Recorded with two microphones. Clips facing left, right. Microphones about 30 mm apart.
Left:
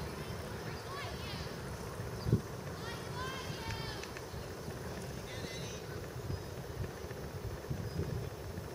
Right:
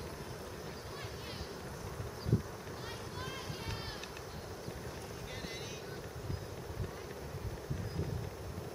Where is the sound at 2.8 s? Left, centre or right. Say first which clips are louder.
Left 3 dB; centre.